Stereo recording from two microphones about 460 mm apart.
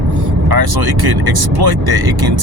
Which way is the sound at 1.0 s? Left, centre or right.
Right.